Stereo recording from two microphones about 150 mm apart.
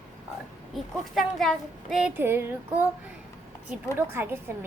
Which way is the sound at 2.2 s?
15° right (ahead or behind).